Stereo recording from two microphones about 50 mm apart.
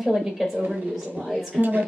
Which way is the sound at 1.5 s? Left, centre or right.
Right.